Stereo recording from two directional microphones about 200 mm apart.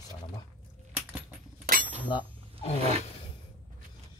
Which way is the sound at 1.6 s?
45° right (ahead or behind).